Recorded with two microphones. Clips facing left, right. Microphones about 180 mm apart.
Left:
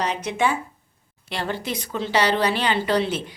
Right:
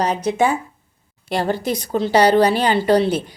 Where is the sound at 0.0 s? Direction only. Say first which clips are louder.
Right 5 dB; 40° right (ahead or behind).